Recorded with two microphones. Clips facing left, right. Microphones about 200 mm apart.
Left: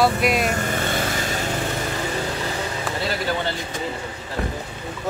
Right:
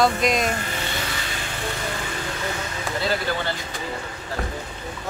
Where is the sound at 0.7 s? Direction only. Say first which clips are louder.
Left 6 dB; 50° left (ahead or behind).